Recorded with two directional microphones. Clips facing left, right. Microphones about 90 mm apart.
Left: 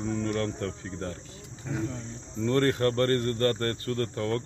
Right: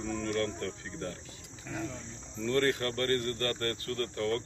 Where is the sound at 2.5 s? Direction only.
35° left (ahead or behind).